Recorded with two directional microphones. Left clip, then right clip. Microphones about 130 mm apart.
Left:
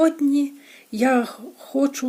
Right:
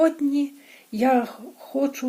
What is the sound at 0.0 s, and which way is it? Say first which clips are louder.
Speech: left 2 dB; 35° left (ahead or behind).